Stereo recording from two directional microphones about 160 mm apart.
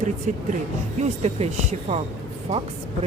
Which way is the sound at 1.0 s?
45° right (ahead or behind).